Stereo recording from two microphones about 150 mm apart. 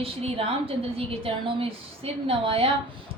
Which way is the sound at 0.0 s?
40° right (ahead or behind).